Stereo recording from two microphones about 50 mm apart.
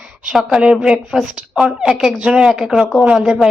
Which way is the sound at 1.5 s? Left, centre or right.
Centre.